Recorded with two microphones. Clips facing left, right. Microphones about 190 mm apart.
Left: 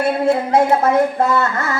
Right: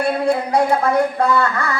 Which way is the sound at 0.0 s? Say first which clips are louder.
Left 2 dB; 20° left (ahead or behind).